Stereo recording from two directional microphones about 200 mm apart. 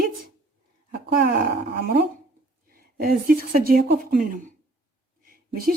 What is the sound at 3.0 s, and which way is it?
Dishes, 45° right (ahead or behind).